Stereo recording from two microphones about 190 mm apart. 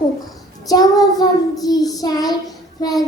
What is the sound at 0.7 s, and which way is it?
Child singing, 20° left (ahead or behind).